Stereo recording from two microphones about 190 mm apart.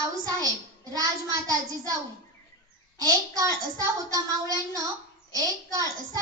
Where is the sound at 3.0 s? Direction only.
20° right (ahead or behind).